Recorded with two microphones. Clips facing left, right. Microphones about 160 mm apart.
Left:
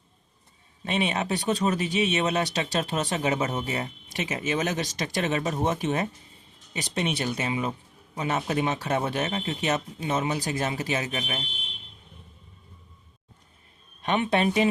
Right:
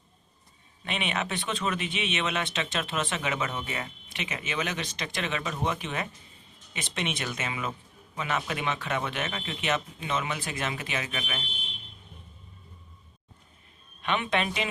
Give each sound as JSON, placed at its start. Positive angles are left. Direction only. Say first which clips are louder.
{"t": 0.9, "sound": "speech", "louder": "left 5 dB", "side_deg": 35}
{"t": 14.0, "sound": "speech", "louder": "left 4 dB", "side_deg": 40}